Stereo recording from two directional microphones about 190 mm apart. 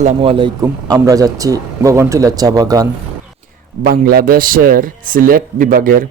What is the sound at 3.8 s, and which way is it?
A man's voice, 50° right (ahead or behind).